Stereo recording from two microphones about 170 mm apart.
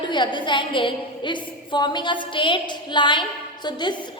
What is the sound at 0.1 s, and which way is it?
A woman's voice, 25° left (ahead or behind).